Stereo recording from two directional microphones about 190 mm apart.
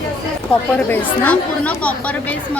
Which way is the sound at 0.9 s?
10° left (ahead or behind).